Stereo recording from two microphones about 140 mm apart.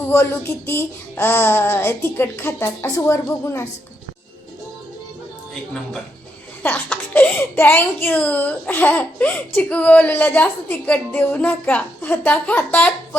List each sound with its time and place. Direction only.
0.1 s speech: 15° left (ahead or behind)
6.6 s speech: 10° left (ahead or behind)